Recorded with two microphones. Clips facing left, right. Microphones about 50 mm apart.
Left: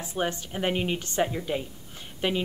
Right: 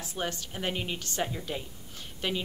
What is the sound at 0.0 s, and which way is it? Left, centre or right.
A woman's voice, left.